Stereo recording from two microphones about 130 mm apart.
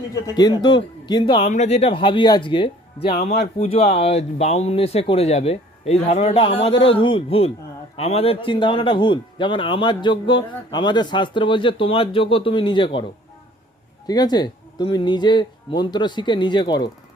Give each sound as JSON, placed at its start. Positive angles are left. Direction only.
{"t": 0.1, "sound": "a man's voice", "side_deg": 30}
{"t": 1.5, "sound": "a man's voice", "side_deg": 60}
{"t": 3.2, "sound": "a man's voice", "side_deg": 60}
{"t": 14.1, "sound": "a man's voice", "side_deg": 30}